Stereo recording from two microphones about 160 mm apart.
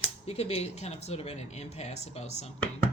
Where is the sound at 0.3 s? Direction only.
40° left (ahead or behind).